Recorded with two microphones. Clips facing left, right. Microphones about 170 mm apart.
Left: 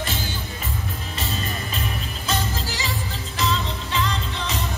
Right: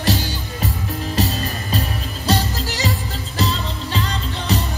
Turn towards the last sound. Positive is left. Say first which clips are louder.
# right 5 dB
turn(degrees=-35)  # may be behind; listen again after turning